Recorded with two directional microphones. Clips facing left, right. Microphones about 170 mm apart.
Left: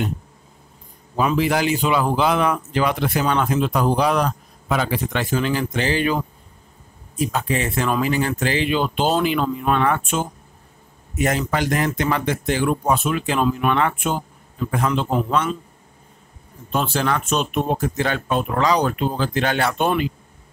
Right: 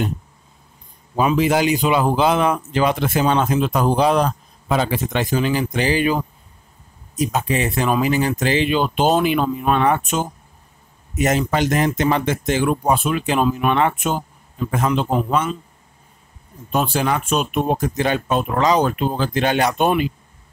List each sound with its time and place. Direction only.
1.1 s speech: 20° right (ahead or behind)
16.7 s speech: 15° right (ahead or behind)